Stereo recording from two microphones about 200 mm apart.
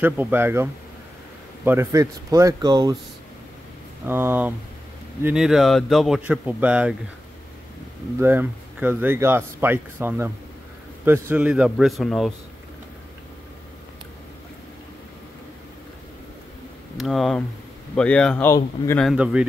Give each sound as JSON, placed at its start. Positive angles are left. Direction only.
{"t": 0.0, "sound": "speech", "side_deg": -10}
{"t": 4.0, "sound": "a man's voice", "side_deg": -10}
{"t": 8.2, "sound": "a man's voice", "side_deg": -10}
{"t": 16.9, "sound": "a man's voice", "side_deg": 0}
{"t": 19.0, "sound": "a man's voice", "side_deg": -5}